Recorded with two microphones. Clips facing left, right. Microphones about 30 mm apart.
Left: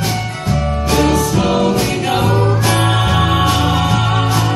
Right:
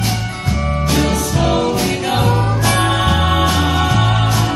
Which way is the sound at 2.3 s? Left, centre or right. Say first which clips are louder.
Left 2 dB; centre.